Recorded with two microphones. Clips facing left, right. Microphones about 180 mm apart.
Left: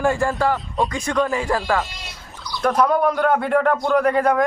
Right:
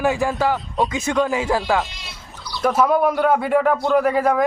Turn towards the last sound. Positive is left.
turn(degrees=0)  # may be behind; listen again after turning